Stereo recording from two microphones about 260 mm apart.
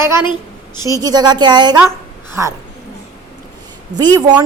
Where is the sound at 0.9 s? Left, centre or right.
Centre.